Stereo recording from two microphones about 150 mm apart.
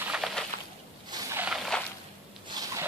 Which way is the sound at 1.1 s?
15° right (ahead or behind).